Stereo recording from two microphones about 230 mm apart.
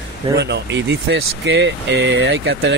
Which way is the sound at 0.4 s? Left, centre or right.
Right.